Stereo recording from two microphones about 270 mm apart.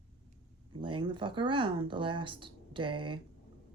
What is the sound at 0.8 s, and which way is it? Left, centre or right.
Speech, centre.